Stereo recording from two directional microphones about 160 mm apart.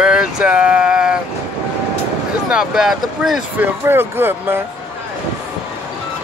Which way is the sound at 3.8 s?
15° right (ahead or behind).